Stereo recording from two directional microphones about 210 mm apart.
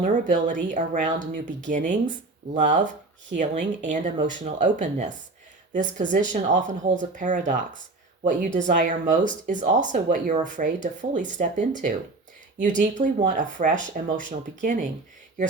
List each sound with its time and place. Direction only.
0.0 s speech: 35° right (ahead or behind)